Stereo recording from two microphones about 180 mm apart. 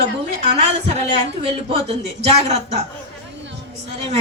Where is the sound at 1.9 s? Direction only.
35° right (ahead or behind).